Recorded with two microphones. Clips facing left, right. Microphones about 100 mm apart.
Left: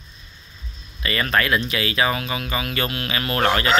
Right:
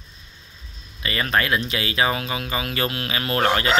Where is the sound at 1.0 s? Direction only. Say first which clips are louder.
Left 1 dB; 20° right (ahead or behind).